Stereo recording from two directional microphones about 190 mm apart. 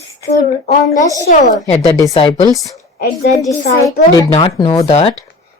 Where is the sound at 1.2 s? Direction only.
40° left (ahead or behind).